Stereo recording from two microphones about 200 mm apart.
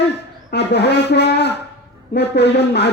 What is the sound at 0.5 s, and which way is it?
A man's voice, 55° left (ahead or behind).